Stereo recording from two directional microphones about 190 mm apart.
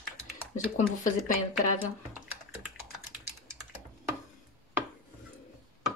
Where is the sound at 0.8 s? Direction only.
40° left (ahead or behind).